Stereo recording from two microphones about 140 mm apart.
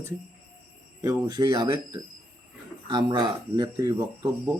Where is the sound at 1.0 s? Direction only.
20° right (ahead or behind).